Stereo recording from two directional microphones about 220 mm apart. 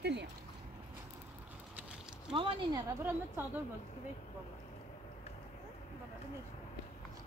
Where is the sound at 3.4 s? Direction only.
10° right (ahead or behind).